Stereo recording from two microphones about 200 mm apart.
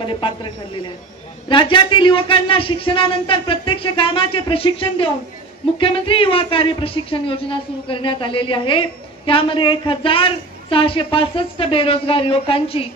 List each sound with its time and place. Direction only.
0.0 s speech: 25° left (ahead or behind)
1.5 s speech: 25° left (ahead or behind)